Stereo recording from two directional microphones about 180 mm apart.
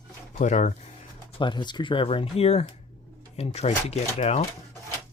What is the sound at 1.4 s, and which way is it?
Speech, 25° left (ahead or behind).